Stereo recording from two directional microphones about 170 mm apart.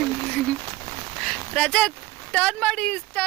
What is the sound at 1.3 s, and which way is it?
Speech, 5° left (ahead or behind).